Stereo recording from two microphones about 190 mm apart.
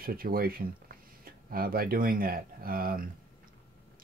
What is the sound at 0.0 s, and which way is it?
Speech, 50° right (ahead or behind).